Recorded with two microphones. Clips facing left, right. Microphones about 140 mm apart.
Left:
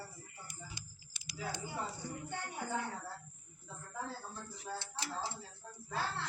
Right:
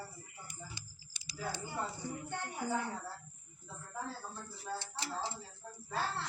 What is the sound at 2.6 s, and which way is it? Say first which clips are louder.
Speech: right 4 dB; 10° right (ahead or behind).